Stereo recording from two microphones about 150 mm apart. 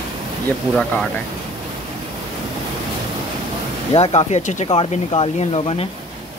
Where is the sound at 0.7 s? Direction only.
5° left (ahead or behind).